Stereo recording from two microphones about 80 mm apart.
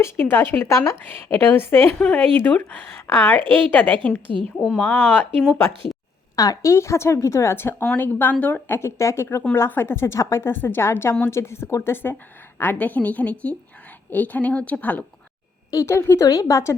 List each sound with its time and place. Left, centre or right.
0.0 s a woman's voice: left
6.3 s a woman's voice: left
12.5 s a woman's voice: left
15.7 s a woman's voice: left